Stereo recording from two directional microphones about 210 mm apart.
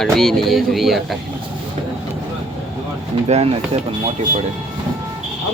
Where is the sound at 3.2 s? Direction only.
30° right (ahead or behind).